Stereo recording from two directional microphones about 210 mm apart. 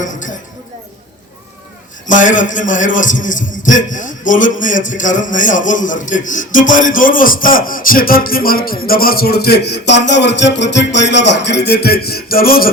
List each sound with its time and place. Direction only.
0.0 s a man's voice: 35° left (ahead or behind)
2.0 s a man's voice: 40° left (ahead or behind)